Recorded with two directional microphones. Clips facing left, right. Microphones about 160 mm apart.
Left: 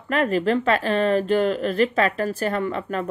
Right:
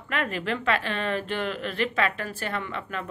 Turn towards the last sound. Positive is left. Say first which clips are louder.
# left 8 dB
turn(degrees=40)  # may be behind; listen again after turning